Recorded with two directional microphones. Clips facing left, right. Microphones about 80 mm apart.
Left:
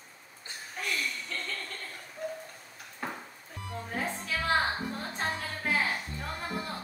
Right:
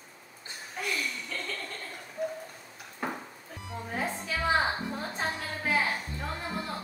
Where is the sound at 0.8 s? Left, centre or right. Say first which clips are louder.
Right 1 dB; centre.